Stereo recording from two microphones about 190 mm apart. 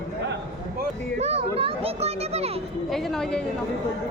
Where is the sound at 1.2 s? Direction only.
35° right (ahead or behind).